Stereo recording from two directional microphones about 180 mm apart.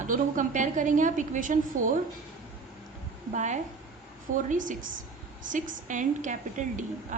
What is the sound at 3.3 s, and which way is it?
A woman's voice, 40° right (ahead or behind).